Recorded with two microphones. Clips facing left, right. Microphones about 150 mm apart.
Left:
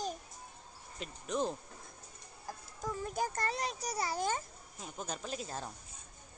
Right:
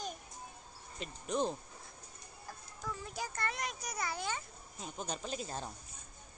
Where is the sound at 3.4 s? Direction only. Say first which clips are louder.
Left 3 dB; 35° left (ahead or behind).